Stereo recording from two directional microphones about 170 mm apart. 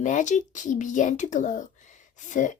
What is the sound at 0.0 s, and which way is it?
Speech, 45° left (ahead or behind).